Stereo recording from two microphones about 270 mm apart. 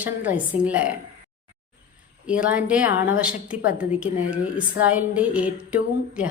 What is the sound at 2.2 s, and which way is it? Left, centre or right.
A woman's voice, centre.